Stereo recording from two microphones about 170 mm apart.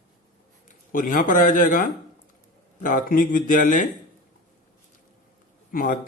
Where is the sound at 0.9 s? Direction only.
50° left (ahead or behind).